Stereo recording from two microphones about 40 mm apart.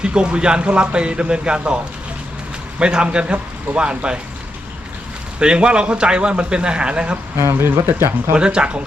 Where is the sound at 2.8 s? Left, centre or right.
Right.